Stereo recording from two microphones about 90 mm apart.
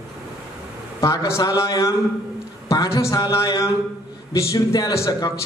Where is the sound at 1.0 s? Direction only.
35° left (ahead or behind).